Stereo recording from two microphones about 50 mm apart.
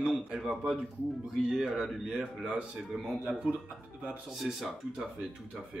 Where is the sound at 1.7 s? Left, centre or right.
Centre.